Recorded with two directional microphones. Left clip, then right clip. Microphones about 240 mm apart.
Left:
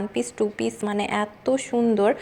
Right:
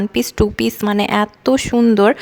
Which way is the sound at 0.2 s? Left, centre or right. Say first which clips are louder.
Right 8 dB; right.